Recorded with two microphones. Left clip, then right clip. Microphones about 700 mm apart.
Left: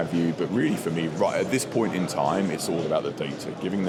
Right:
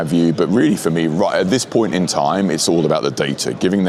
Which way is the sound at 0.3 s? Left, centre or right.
Right.